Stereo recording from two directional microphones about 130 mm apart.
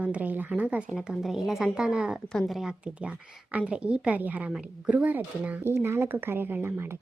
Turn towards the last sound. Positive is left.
turn(degrees=-20)  # may be behind; listen again after turning